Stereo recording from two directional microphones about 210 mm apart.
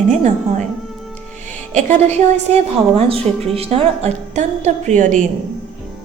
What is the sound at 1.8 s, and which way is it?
A woman's voice, 30° right (ahead or behind).